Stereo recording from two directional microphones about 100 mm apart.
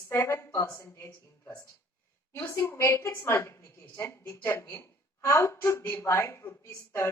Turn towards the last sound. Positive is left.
turn(degrees=25)  # may be behind; listen again after turning